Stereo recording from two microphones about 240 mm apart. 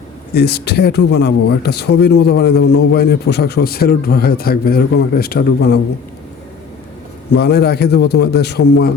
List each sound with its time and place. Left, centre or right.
0.3 s speech: left
7.3 s a man's voice: left